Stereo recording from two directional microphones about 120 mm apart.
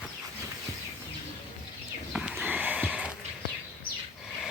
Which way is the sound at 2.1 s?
5° right (ahead or behind).